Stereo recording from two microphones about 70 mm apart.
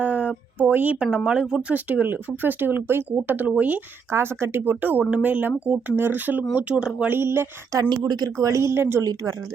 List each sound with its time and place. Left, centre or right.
0.0 s a sound: centre
1.1 s speech: centre
1.7 s speech: right
4.1 s speech: right; by 7.1 s centre
7.1 s speech: right
7.9 s speech: right
9.0 s speech: right